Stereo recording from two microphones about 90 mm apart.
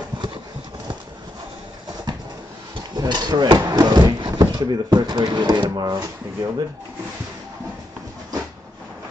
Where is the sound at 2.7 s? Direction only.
55° right (ahead or behind).